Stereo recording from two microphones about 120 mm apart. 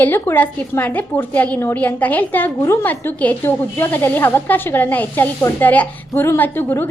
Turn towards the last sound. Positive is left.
turn(degrees=15)  # may be behind; listen again after turning